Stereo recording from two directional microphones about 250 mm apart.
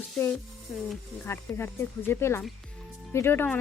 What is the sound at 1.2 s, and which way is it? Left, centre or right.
Speech, centre.